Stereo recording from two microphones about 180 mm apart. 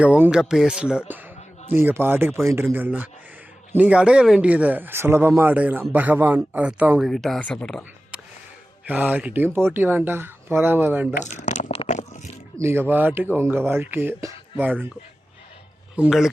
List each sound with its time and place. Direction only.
0.0 s speech: 5° right (ahead or behind)
8.9 s speech: 10° right (ahead or behind)
11.2 s a sound: 40° left (ahead or behind)
12.5 s speech: 15° right (ahead or behind)
16.0 s speech: centre (ahead or behind)